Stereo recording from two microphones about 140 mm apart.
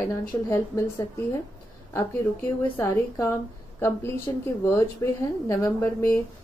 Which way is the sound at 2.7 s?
15° left (ahead or behind).